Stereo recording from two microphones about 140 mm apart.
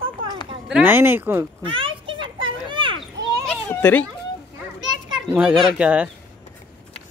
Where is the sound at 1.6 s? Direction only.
40° right (ahead or behind).